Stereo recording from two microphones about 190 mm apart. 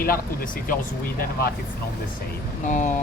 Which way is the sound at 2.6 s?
40° left (ahead or behind).